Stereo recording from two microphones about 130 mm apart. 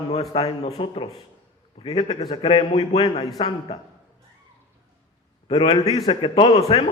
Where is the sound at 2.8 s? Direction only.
35° left (ahead or behind).